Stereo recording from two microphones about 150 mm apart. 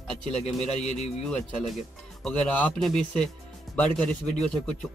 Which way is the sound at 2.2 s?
5° left (ahead or behind).